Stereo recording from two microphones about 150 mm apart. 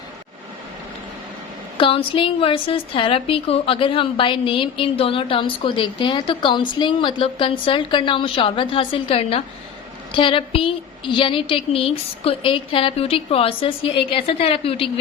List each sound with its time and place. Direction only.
1.8 s a woman's voice: 35° left (ahead or behind)